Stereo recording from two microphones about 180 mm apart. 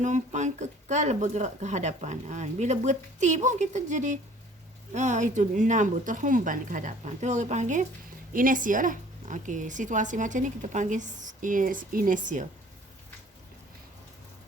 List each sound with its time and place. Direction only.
0.0 s a woman's voice: 40° right (ahead or behind)